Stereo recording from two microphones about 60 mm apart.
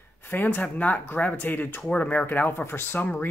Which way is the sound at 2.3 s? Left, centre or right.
Left.